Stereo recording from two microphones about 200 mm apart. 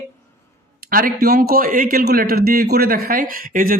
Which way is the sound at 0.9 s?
45° right (ahead or behind).